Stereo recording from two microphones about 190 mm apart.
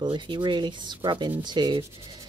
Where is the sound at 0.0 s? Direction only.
25° right (ahead or behind).